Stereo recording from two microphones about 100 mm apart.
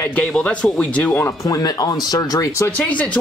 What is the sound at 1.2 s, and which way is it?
Speech, 40° left (ahead or behind).